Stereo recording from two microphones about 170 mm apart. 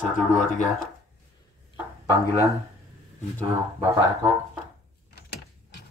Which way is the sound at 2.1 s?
15° left (ahead or behind).